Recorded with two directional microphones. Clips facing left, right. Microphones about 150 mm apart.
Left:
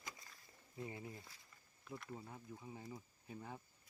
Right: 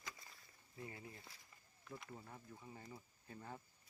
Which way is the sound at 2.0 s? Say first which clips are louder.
Left 4 dB; 10° left (ahead or behind).